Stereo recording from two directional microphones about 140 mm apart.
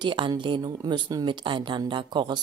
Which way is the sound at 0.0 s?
35° right (ahead or behind).